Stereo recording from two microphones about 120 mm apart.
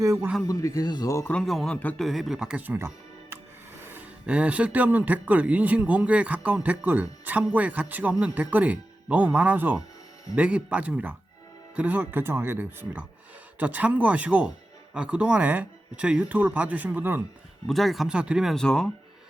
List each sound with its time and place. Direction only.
0.0 s a man's voice: 25° right (ahead or behind)
0.4 s speech: 25° left (ahead or behind)
1.3 s a man's voice: 5° left (ahead or behind)
2.0 s a man's voice: centre (ahead or behind); by 17.2 s 15° right (ahead or behind)
17.7 s speech: centre (ahead or behind)
18.5 s speech: 5° left (ahead or behind)